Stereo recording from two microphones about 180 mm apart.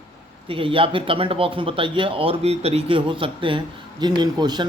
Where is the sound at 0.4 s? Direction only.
30° right (ahead or behind).